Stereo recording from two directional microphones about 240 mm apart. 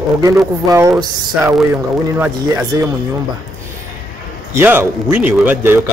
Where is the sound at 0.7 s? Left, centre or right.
Centre.